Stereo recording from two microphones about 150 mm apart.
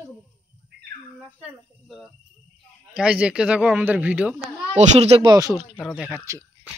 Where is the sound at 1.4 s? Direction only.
Centre (ahead or behind).